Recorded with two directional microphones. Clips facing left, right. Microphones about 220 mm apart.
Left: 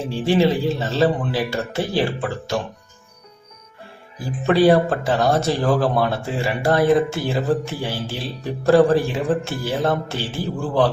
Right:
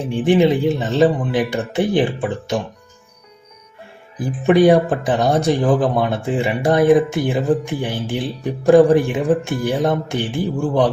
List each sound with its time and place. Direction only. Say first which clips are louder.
0.0 s speech: right 3 dB; 15° right (ahead or behind)
4.2 s speech: right 3 dB; 15° right (ahead or behind)